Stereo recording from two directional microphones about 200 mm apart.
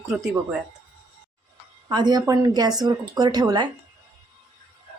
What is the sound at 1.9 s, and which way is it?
Speech, 20° right (ahead or behind).